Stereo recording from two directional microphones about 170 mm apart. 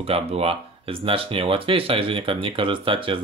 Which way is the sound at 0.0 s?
35° right (ahead or behind).